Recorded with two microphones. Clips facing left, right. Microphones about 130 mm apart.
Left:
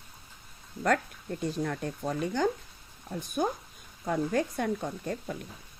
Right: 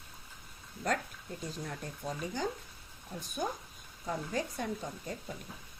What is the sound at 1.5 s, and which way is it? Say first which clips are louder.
Speech: left 9 dB; 70° left (ahead or behind).